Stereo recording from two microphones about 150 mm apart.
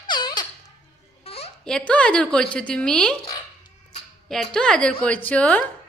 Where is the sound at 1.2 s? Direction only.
40° left (ahead or behind).